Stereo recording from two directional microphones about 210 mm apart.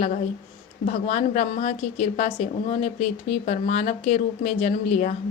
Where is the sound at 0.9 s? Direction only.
35° left (ahead or behind).